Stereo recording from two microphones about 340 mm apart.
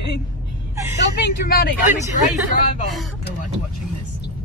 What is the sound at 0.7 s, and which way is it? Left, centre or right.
Vehicle, centre.